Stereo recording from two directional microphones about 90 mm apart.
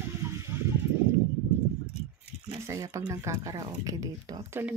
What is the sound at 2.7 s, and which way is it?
A woman's voice, 35° right (ahead or behind).